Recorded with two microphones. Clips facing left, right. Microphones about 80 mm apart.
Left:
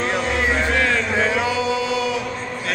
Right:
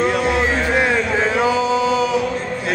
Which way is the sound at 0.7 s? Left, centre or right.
Centre.